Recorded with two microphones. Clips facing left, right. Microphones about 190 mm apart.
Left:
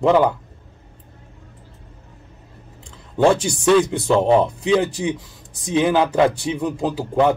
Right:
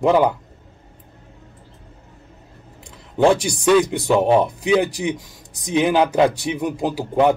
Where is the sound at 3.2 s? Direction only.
15° right (ahead or behind).